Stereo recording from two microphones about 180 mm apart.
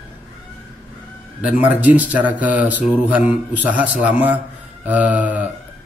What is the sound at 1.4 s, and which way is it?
Speech, 10° right (ahead or behind).